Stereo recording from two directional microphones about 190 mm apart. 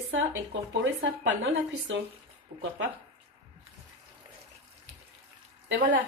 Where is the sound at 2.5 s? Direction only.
35° right (ahead or behind).